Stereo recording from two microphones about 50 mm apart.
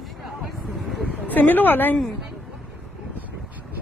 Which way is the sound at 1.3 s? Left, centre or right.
Left.